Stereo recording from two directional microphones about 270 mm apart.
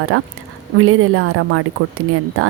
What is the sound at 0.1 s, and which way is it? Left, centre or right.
A woman's voice, right.